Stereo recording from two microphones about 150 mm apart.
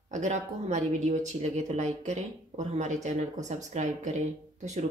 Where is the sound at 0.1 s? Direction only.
50° right (ahead or behind).